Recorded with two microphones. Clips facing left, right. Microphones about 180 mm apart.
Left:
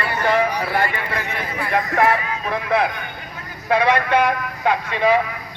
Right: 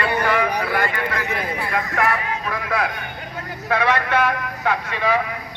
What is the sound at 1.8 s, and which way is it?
A man's voice, 25° left (ahead or behind).